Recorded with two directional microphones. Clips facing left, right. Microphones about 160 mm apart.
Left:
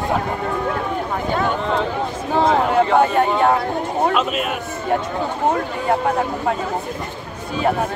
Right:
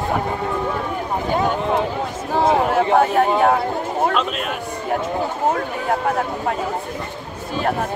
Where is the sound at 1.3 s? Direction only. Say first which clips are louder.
Right 1 dB; 20° right (ahead or behind).